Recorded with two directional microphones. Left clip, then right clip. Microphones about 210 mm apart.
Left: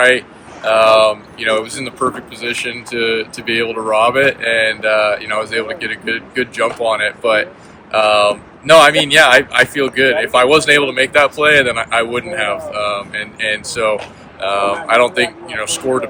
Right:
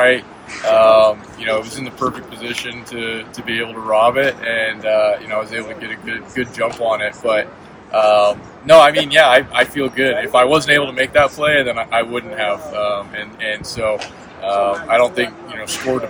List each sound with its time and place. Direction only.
0.7 s speech: 5° right (ahead or behind)